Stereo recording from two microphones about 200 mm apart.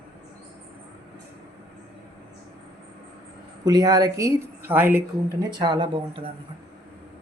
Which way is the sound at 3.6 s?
20° right (ahead or behind).